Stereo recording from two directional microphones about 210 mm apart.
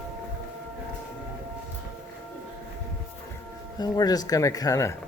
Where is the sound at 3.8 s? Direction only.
20° left (ahead or behind).